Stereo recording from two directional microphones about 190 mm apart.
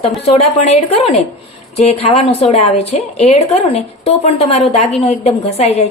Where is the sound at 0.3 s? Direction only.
30° left (ahead or behind).